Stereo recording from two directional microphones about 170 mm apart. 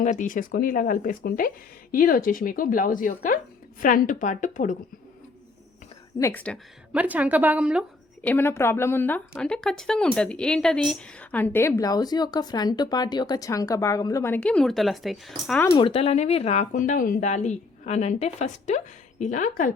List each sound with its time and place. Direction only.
0.0 s speech: 45° left (ahead or behind)
6.1 s speech: 15° left (ahead or behind)
6.9 s speech: 10° right (ahead or behind)
8.2 s speech: 10° left (ahead or behind)
15.7 s speech: 35° left (ahead or behind); by 19.7 s 50° left (ahead or behind)